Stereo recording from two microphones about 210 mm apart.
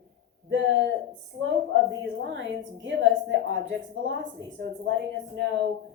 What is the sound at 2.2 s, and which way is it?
A woman's voice, 60° right (ahead or behind).